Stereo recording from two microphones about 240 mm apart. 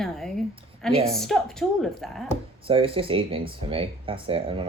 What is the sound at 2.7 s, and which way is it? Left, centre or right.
Speech, right.